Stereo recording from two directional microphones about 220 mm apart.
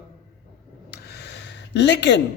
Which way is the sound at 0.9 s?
50° left (ahead or behind).